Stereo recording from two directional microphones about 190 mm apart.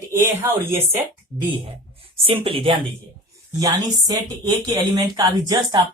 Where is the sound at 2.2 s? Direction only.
30° right (ahead or behind).